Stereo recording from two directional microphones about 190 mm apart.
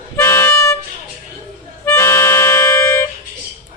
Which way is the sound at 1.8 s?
10° left (ahead or behind).